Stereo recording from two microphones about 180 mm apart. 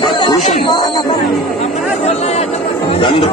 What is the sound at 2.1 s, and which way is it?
Speech, 35° left (ahead or behind).